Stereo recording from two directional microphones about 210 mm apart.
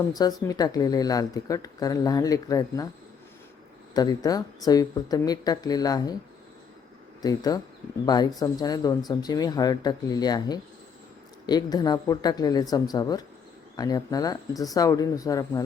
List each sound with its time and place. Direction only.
0.1 s speech: 20° left (ahead or behind)
3.9 s speech: 20° left (ahead or behind)
7.2 s speech: 15° left (ahead or behind)